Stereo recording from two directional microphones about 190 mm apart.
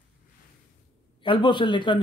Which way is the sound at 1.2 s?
25° left (ahead or behind).